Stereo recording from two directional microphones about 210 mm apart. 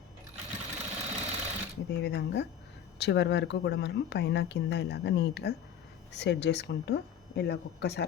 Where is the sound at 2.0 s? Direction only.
55° left (ahead or behind).